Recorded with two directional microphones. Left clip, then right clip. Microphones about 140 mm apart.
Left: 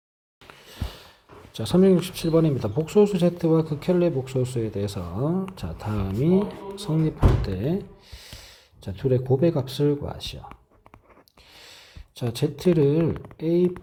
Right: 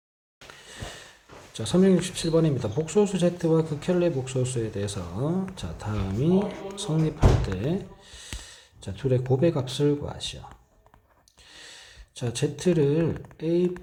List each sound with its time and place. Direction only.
0.6 s sniff: 35° left (ahead or behind)
1.5 s speech: 35° left (ahead or behind)
11.5 s speech: 40° left (ahead or behind)